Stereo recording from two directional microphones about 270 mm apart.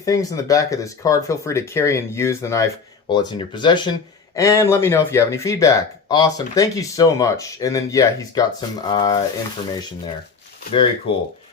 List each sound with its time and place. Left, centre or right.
0.0 s speech: centre
10.7 s speech: centre